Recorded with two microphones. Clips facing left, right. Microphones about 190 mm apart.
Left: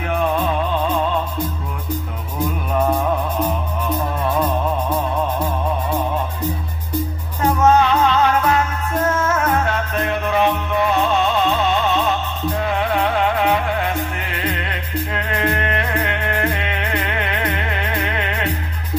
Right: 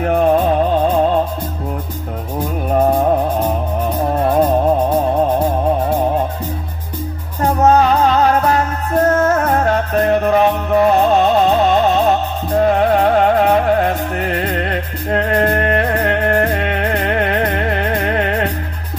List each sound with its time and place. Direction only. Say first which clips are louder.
0.0 s music: right 7 dB; 45° right (ahead or behind)
2.7 s music: right 6 dB; 35° right (ahead or behind)
7.4 s music: right 3 dB; 35° right (ahead or behind)